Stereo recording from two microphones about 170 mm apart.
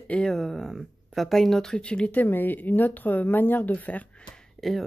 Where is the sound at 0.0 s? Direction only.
5° left (ahead or behind).